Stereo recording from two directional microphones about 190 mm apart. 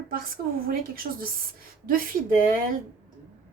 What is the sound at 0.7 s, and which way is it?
Speech, 50° right (ahead or behind).